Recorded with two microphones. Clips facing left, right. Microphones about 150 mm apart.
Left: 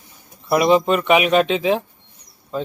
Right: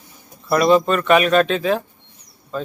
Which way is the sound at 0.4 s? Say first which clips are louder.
Even; 15° left (ahead or behind).